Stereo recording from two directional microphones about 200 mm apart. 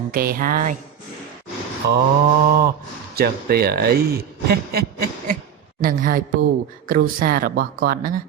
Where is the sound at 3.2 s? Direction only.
50° right (ahead or behind).